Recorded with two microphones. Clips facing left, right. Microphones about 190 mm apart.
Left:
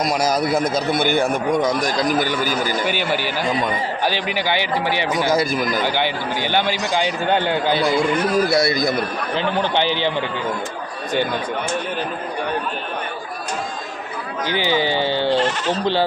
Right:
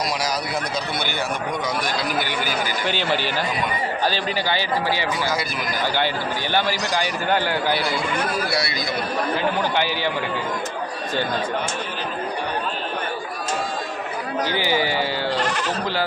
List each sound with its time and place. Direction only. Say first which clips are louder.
0.0 s a man's voice: left 6 dB; 50° left (ahead or behind)
2.8 s a man's voice: left 2 dB; 10° left (ahead or behind)
7.8 s a man's voice: left 6 dB; 50° left (ahead or behind)
9.7 s a man's voice: left 3 dB; 25° left (ahead or behind)
14.4 s a man's voice: left 3 dB; 20° left (ahead or behind)